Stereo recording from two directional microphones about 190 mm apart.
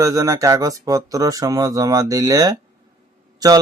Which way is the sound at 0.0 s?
15° right (ahead or behind).